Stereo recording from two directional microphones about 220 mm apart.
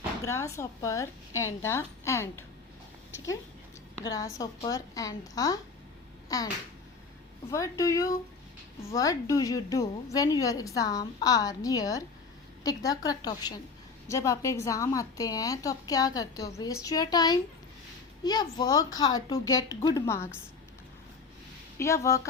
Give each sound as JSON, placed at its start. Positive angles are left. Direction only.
{"t": 0.3, "sound": "a woman's voice", "side_deg": 10}
{"t": 1.3, "sound": "a woman's voice", "side_deg": 70}
{"t": 1.6, "sound": "a woman's voice", "side_deg": 10}
{"t": 4.0, "sound": "a woman's voice", "side_deg": 15}
{"t": 6.2, "sound": "finger snapping", "side_deg": 15}
{"t": 7.5, "sound": "a woman's voice", "side_deg": 15}
{"t": 21.8, "sound": "a woman's voice", "side_deg": 15}